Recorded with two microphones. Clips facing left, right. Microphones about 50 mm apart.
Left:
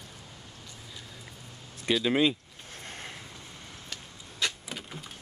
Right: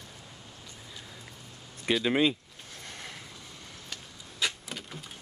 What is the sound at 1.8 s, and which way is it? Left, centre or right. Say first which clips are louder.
Speech: even; centre.